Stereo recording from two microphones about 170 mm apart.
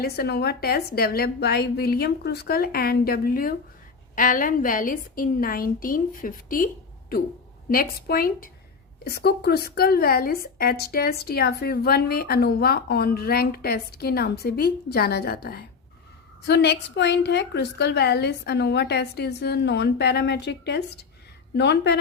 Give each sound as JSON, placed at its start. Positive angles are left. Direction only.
{"t": 0.0, "sound": "a woman's voice", "side_deg": 70}
{"t": 7.7, "sound": "a woman's voice", "side_deg": 60}
{"t": 16.5, "sound": "a woman's voice", "side_deg": 80}